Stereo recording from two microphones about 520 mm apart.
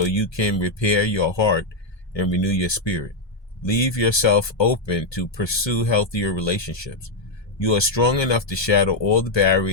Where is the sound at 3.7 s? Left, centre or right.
Left.